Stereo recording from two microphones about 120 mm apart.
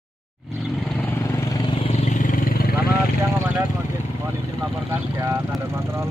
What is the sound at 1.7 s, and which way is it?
Vehicle, 50° left (ahead or behind).